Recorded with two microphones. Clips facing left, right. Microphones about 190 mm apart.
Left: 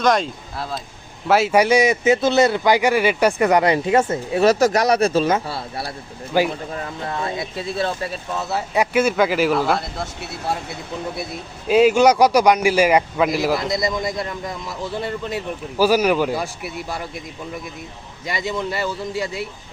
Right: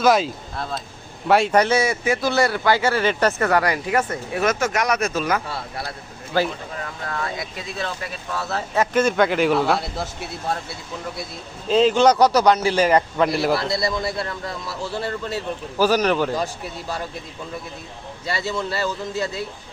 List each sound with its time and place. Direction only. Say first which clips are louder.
0.0 s a man's voice: right 1 dB; 5° right (ahead or behind); by 5.9 s 30° left (ahead or behind)
6.3 s a man's voice: left 3 dB; 15° left (ahead or behind)
6.8 s speech: left 1 dB; 25° left (ahead or behind)
8.5 s a man's voice: left 1 dB; 10° left (ahead or behind)
11.7 s a man's voice: left 2 dB; 10° left (ahead or behind)
13.6 s a man's voice: left 1 dB; 20° left (ahead or behind)
18.3 s a man's voice: left 1 dB; 15° left (ahead or behind)